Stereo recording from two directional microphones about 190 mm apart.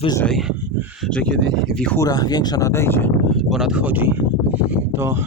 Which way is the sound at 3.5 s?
5° right (ahead or behind).